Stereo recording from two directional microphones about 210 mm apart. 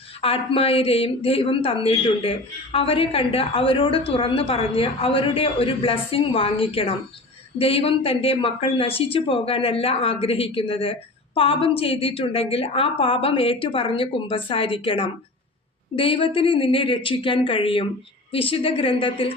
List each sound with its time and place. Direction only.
0.2 s a woman's voice: 25° left (ahead or behind)